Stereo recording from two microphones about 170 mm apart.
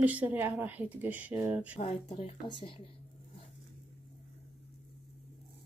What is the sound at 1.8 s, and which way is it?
Speech, 30° left (ahead or behind).